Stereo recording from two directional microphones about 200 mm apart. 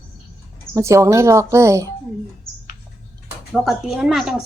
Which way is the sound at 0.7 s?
15° right (ahead or behind).